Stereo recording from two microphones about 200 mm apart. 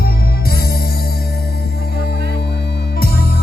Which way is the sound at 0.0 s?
50° left (ahead or behind).